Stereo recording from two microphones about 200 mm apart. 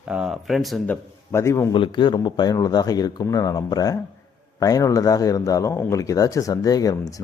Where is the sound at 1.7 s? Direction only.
25° left (ahead or behind).